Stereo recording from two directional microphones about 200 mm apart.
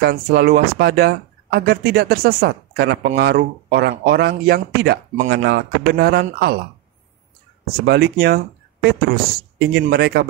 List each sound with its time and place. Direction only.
0.0 s speech: 50° right (ahead or behind)
7.8 s speech: 55° right (ahead or behind)